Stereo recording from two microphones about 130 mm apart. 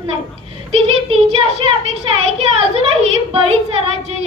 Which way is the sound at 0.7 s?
45° right (ahead or behind).